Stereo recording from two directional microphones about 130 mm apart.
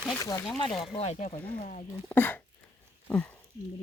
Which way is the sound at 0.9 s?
55° left (ahead or behind).